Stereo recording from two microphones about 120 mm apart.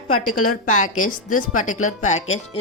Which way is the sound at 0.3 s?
90° left.